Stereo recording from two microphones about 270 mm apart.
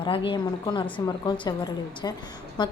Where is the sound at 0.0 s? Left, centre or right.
Centre.